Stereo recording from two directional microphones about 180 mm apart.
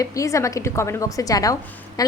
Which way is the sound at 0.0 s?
20° left (ahead or behind).